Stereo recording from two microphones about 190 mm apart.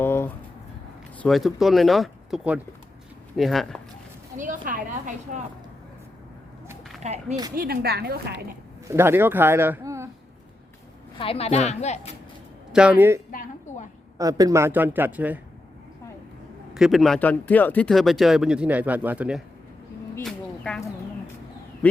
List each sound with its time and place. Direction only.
0.0 s a sound: 10° left (ahead or behind)
1.2 s speech: centre (ahead or behind)
4.4 s speech: 45° right (ahead or behind)
7.0 s speech: 35° right (ahead or behind)
7.5 s a woman's voice: 50° right (ahead or behind)
8.9 s speech: 10° right (ahead or behind)
11.2 s a woman's voice: 30° left (ahead or behind)
12.7 s speech: 5° right (ahead or behind)
16.7 s speech: centre (ahead or behind)
20.2 s a sound: 5° left (ahead or behind)